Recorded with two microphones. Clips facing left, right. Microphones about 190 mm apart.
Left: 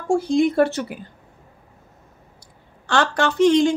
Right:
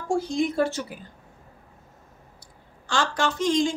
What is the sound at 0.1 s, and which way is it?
Speech, 60° left (ahead or behind).